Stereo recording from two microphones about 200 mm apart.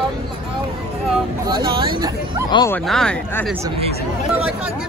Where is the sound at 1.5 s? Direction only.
20° right (ahead or behind).